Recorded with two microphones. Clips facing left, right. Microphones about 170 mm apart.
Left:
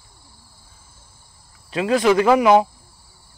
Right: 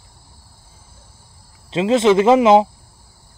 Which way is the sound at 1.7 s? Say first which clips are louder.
Right 3 dB; 25° right (ahead or behind).